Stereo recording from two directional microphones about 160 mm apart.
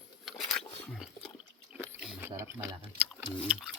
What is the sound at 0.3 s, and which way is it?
Biting, centre (ahead or behind).